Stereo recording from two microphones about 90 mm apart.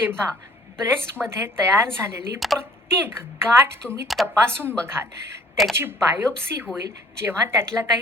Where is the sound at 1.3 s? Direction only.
25° right (ahead or behind).